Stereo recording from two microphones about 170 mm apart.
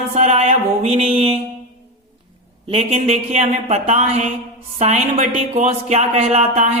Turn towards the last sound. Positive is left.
turn(degrees=-40)  # may be behind; listen again after turning